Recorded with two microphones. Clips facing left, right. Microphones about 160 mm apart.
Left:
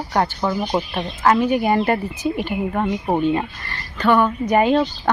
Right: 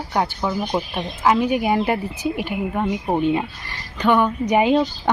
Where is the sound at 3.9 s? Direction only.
15° right (ahead or behind).